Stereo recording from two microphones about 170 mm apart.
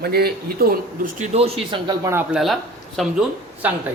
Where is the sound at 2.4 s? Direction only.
Centre (ahead or behind).